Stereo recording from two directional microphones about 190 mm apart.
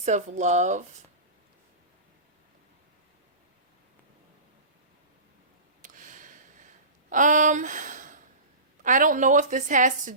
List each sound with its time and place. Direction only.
0.0 s speech: 40° right (ahead or behind)
5.8 s a sound: 45° right (ahead or behind)
7.1 s a woman's voice: 40° right (ahead or behind)